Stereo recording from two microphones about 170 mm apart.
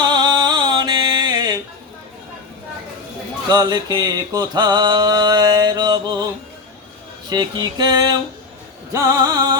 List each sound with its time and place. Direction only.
0.0 s mantra: 25° right (ahead or behind)
3.5 s mantra: 25° right (ahead or behind)
7.3 s mantra: 25° right (ahead or behind)
8.9 s music: 15° right (ahead or behind)